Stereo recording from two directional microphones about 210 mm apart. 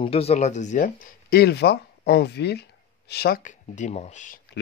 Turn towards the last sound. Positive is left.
turn(degrees=35)  # may be behind; listen again after turning